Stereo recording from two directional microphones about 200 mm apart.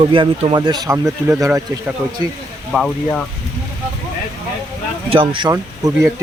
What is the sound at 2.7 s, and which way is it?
Speech, 5° left (ahead or behind).